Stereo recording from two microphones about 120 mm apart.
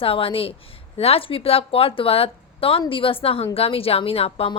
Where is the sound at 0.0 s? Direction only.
50° left (ahead or behind).